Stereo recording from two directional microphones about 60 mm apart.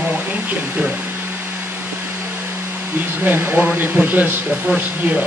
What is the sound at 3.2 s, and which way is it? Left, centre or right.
Speech, right.